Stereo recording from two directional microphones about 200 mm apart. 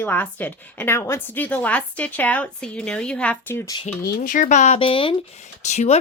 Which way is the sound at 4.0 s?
50° left (ahead or behind).